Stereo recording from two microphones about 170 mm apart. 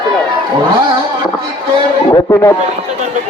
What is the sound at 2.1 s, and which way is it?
Speech, 20° left (ahead or behind).